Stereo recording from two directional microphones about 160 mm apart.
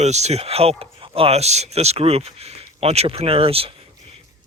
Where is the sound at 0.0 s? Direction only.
45° right (ahead or behind).